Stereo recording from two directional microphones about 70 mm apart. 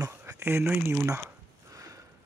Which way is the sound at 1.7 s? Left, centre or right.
Right.